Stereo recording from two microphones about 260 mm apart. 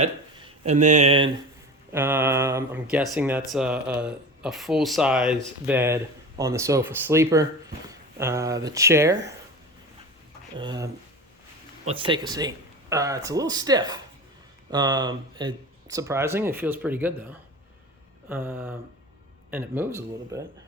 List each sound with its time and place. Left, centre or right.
0.0 s speech: right
1.9 s speech: centre
10.6 s speech: centre
11.9 s speech: centre
18.3 s speech: centre